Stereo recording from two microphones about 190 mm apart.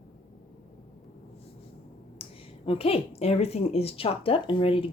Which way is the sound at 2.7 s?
30° left (ahead or behind).